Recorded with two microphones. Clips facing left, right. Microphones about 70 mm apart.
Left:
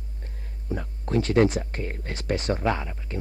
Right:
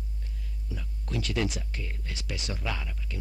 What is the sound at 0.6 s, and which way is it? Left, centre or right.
Speech, left.